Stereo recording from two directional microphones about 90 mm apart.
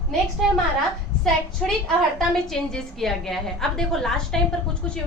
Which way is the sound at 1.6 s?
5° left (ahead or behind).